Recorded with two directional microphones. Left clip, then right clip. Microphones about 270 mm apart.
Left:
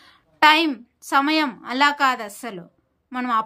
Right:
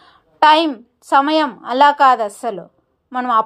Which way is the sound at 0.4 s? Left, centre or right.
Centre.